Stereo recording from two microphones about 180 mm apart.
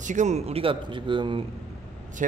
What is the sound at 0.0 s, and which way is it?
A man's voice, 45° right (ahead or behind).